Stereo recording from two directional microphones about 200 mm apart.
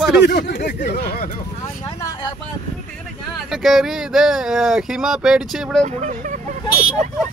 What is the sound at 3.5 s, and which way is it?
Speech, centre (ahead or behind).